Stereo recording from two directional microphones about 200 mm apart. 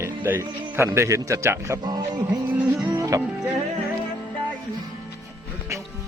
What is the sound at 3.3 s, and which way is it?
Music, 5° right (ahead or behind).